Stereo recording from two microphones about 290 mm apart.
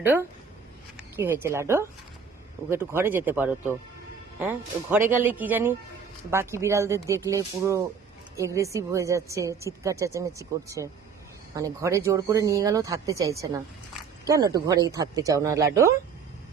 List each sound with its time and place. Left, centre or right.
0.0 s a woman's voice: centre